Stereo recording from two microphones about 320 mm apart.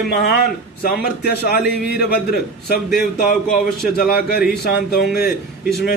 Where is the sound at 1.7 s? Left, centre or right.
Left.